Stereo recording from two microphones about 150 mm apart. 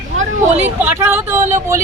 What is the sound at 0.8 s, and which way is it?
Speech, 15° right (ahead or behind).